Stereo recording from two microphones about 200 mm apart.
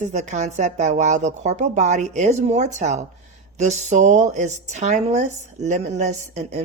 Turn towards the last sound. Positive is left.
turn(degrees=-35)  # may be behind; listen again after turning